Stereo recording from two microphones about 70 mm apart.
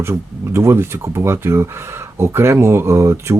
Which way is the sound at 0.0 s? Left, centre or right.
Right.